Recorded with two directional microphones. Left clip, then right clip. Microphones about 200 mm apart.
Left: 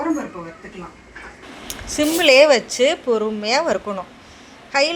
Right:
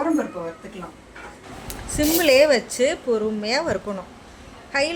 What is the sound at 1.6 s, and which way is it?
A woman's voice, 10° left (ahead or behind).